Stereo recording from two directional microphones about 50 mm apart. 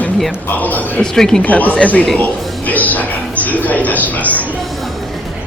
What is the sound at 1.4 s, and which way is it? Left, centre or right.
Speech, left.